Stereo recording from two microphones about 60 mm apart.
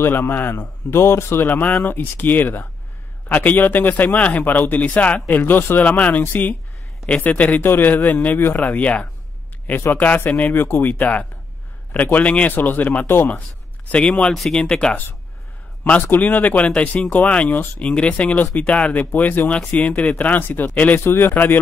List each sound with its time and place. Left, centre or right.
0.0 s a man's voice: left
1.5 s a man's voice: left
7.6 s a man's voice: left
8.6 s a man's voice: left
10.9 s speech: left
13.9 s speech: left
14.3 s speech: centre
14.6 s speech: centre
15.8 s a man's voice: left